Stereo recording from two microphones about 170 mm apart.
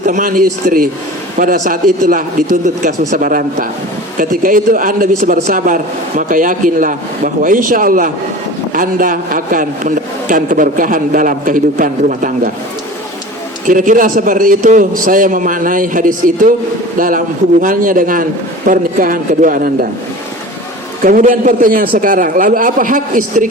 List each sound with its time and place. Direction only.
0.0 s a man's voice: 50° right (ahead or behind)
13.7 s a man's voice: 50° right (ahead or behind)
21.0 s a man's voice: 55° right (ahead or behind)